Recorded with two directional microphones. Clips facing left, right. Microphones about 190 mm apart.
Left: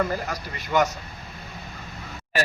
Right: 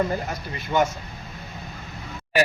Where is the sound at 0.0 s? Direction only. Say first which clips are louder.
Right 1 dB; 25° right (ahead or behind).